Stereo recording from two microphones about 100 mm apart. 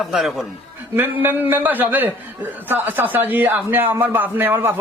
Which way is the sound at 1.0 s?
20° right (ahead or behind).